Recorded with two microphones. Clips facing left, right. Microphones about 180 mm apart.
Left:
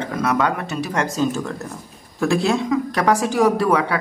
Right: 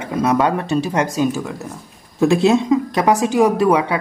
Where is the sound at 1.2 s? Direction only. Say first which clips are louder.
Right 2 dB; 10° right (ahead or behind).